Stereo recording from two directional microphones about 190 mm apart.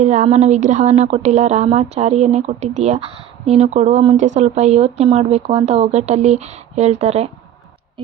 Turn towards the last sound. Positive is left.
turn(degrees=-35)  # may be behind; listen again after turning